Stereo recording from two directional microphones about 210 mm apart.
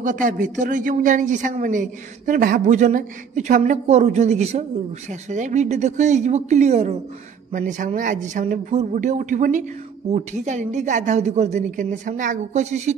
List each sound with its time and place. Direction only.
0.0 s speech: 40° right (ahead or behind)